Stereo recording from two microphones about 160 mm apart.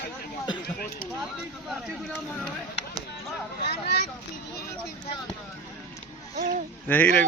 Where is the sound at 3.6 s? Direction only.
90° left.